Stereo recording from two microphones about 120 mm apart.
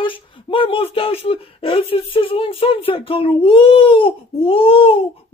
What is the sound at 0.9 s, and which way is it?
Speech, 55° left (ahead or behind).